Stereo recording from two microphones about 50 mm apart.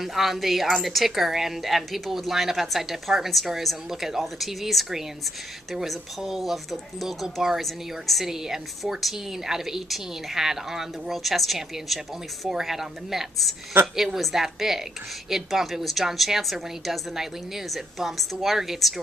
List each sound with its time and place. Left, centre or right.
0.0 s a woman's voice: centre